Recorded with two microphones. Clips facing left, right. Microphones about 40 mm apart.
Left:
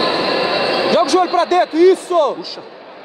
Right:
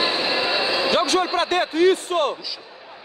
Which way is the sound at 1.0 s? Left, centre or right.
Right.